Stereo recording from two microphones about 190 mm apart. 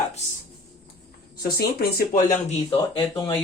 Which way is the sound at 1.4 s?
55° left (ahead or behind).